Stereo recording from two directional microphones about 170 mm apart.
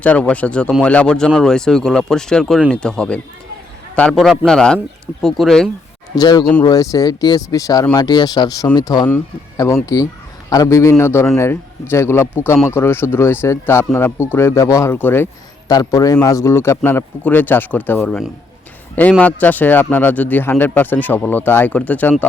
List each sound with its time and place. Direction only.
0.0 s speech: 10° left (ahead or behind)
6.1 s speech: 25° left (ahead or behind)
6.4 s speech: 5° left (ahead or behind)
6.7 s speech: 20° left (ahead or behind)
9.0 s speech: 15° left (ahead or behind)
19.2 s speech: 10° left (ahead or behind)